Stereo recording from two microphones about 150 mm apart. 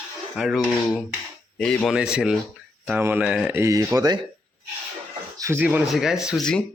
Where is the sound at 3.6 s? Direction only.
20° right (ahead or behind).